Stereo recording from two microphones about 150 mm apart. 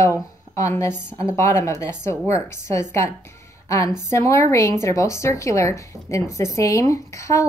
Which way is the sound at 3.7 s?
20° left (ahead or behind).